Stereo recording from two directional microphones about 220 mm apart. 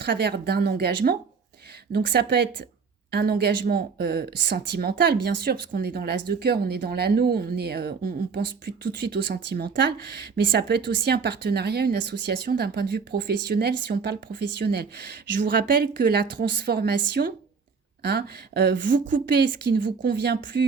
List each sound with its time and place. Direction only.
0.0 s speech: 50° right (ahead or behind)
19.1 s speech: 40° right (ahead or behind)